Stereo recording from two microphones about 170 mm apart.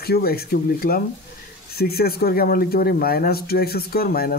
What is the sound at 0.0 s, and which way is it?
Speech, 65° left (ahead or behind).